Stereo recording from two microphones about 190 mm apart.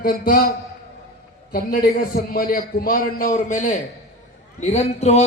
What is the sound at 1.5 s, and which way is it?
A man's voice, 50° left (ahead or behind).